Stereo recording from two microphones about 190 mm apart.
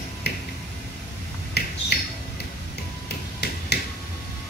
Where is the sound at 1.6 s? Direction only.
60° left (ahead or behind).